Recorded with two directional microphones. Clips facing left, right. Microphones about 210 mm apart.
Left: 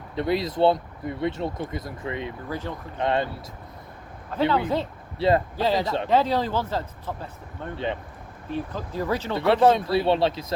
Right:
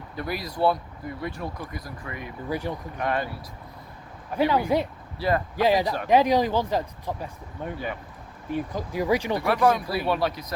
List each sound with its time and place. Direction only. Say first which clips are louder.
0.2 s speech: left 5 dB; 25° left (ahead or behind)
2.5 s speech: right 5 dB; 15° right (ahead or behind)
3.0 s speech: left 3 dB; 25° left (ahead or behind)
4.3 s speech: right 1 dB; 15° right (ahead or behind)
9.4 s speech: left 3 dB; 25° left (ahead or behind)